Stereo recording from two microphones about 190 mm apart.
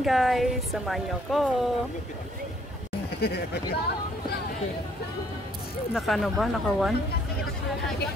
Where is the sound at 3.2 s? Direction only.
55° left (ahead or behind).